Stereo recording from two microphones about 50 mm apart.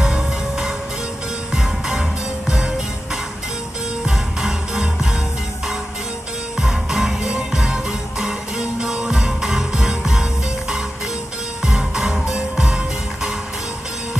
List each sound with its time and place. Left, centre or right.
0.0 s music: centre
4.0 s music: centre
6.6 s music: centre
11.6 s music: centre